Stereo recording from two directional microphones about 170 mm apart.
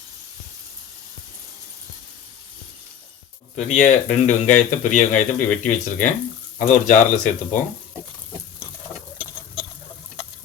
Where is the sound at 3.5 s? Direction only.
45° left (ahead or behind).